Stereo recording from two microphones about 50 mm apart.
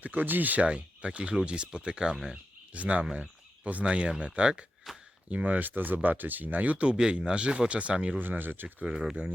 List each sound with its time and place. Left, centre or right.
0.0 s speech: right; by 2.4 s centre
2.7 s speech: right
4.9 s a sound: centre
5.3 s speech: right
5.5 s speech: right
6.9 s speech: centre
8.2 s speech: right
8.8 s speech: centre